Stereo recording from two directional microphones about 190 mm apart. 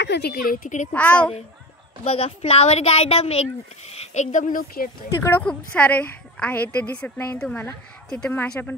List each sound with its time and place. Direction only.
0.0 s a woman's voice: 60° left (ahead or behind); by 0.8 s 45° left (ahead or behind)
0.9 s a woman's voice: 5° left (ahead or behind)
2.0 s a woman's voice: 30° left (ahead or behind)
5.2 s a woman's voice: 10° left (ahead or behind)